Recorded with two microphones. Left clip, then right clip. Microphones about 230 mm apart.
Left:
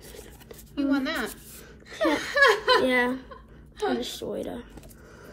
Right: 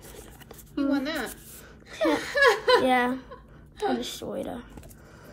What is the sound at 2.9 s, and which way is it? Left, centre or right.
A woman's voice, centre.